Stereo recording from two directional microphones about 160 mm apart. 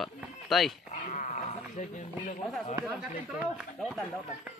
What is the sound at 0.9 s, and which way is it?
Dog, 50° left (ahead or behind).